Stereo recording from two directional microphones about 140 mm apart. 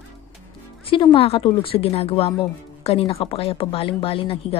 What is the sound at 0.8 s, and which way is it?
A woman's voice, 40° left (ahead or behind).